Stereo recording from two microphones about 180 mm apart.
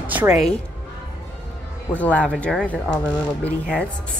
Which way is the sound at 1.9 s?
10° left (ahead or behind).